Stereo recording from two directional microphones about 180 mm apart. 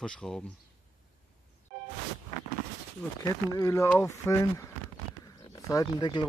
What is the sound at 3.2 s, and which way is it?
Speech, 15° left (ahead or behind).